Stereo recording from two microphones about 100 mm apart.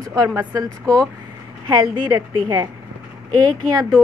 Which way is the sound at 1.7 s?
40° right (ahead or behind).